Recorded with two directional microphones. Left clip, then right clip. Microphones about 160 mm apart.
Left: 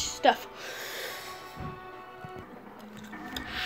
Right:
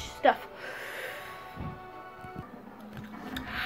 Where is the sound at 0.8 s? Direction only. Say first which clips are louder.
Left 1 dB; 55° left (ahead or behind).